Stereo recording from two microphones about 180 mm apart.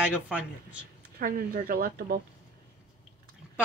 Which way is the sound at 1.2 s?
50° right (ahead or behind).